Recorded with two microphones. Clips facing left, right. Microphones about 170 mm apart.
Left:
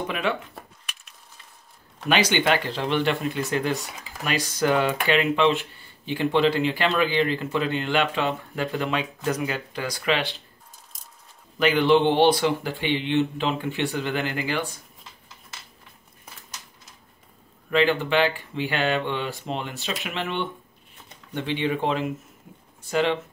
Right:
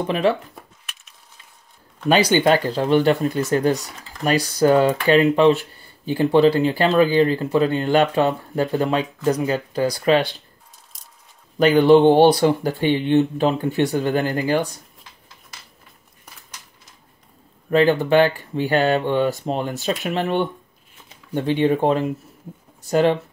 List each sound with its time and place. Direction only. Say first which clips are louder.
0.0 s speech: right 7 dB; 35° right (ahead or behind)
0.6 s a sound: even; centre (ahead or behind)
2.0 s speech: right 6 dB; 35° right (ahead or behind)
3.8 s a sound: even; 10° left (ahead or behind)
4.2 s speech: right 7 dB; 35° right (ahead or behind)
11.5 s speech: right 6 dB; 40° right (ahead or behind)
17.6 s speech: right 5 dB; 40° right (ahead or behind)